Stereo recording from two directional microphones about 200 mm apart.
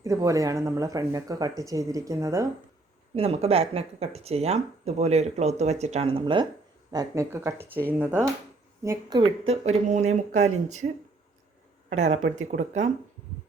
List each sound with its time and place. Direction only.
0.0 s speech: 15° right (ahead or behind)
3.2 s speech: 30° right (ahead or behind)
11.9 s speech: 35° right (ahead or behind)